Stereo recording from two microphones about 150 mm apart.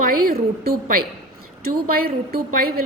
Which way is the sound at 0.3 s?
90° right.